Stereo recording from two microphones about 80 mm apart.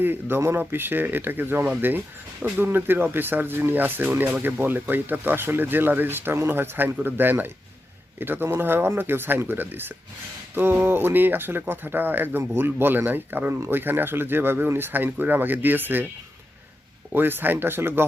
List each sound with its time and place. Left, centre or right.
0.0 s speech: right
17.1 s speech: right